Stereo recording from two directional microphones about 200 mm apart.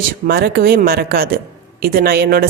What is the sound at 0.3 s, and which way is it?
A woman's voice, 50° right (ahead or behind).